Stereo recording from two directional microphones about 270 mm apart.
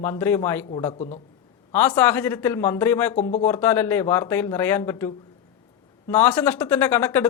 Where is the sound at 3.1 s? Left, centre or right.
Left.